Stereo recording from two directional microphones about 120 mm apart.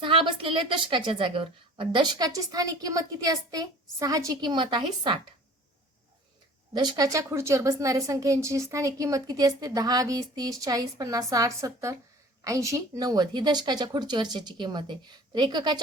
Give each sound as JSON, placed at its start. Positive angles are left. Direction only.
{"t": 0.0, "sound": "a woman's voice", "side_deg": -45}
{"t": 6.7, "sound": "a woman's voice", "side_deg": -35}